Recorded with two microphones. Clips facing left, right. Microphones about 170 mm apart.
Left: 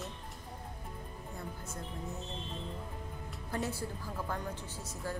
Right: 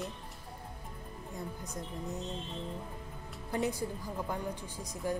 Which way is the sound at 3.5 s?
15° right (ahead or behind).